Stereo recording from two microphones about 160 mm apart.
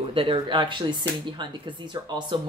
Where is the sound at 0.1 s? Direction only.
35° right (ahead or behind).